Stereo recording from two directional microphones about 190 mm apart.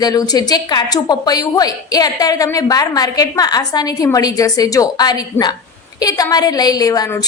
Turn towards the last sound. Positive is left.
turn(degrees=20)  # may be behind; listen again after turning